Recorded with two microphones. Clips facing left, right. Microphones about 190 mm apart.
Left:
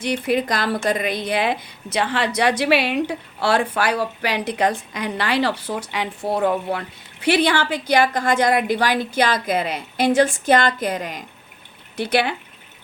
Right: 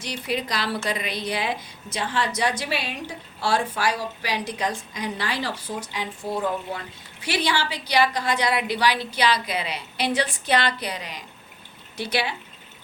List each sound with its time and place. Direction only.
0.0 s a woman's voice: 55° left (ahead or behind)